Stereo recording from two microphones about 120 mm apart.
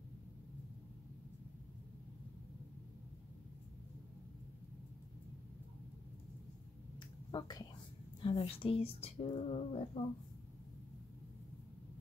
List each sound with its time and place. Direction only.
7.0 s a sound: 40° left (ahead or behind)
8.2 s a woman's voice: 45° left (ahead or behind)
9.2 s speech: 65° left (ahead or behind)